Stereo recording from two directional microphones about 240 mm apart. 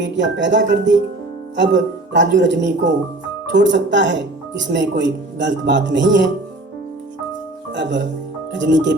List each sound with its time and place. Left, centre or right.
0.0 s speech: right
7.7 s speech: right